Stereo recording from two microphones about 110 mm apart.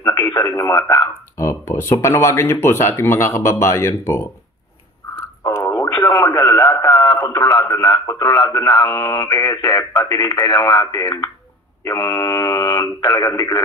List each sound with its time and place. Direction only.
0.0 s speech: 35° left (ahead or behind)
1.4 s speech: 25° left (ahead or behind)
5.4 s radio: 35° left (ahead or behind)
7.2 s speech: 35° left (ahead or behind)